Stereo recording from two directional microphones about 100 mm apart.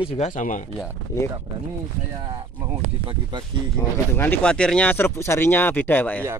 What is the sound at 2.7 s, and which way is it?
Speech, 50° right (ahead or behind).